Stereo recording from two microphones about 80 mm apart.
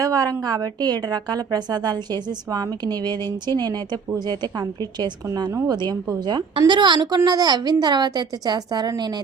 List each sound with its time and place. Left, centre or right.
0.0 s a woman's voice: right